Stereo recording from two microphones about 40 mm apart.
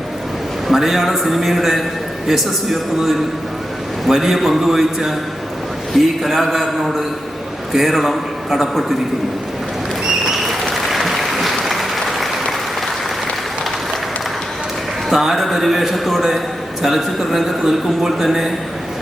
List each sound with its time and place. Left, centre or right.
0.7 s speech: centre
10.1 s applause: centre
15.1 s speech: centre